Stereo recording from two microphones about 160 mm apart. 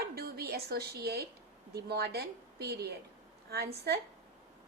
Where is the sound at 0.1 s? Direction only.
75° right (ahead or behind).